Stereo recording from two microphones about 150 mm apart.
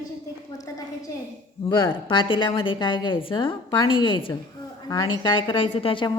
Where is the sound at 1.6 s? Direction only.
30° left (ahead or behind).